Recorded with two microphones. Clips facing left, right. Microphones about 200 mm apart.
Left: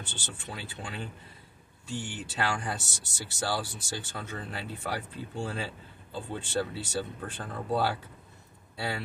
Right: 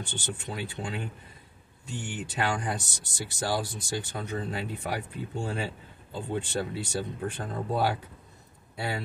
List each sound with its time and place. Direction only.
0.5 s speech: 15° right (ahead or behind)